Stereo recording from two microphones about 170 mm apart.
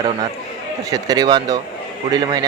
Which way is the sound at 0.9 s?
25° right (ahead or behind).